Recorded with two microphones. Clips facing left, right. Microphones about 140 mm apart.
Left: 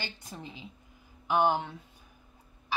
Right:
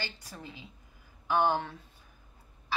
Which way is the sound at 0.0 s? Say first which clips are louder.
Left 1 dB; 20° left (ahead or behind).